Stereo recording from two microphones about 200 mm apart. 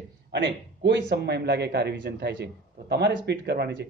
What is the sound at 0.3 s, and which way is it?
Speech, 65° right (ahead or behind).